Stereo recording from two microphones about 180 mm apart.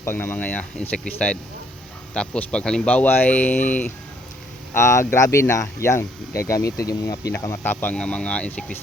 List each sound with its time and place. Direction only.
0.0 s speech: 10° left (ahead or behind)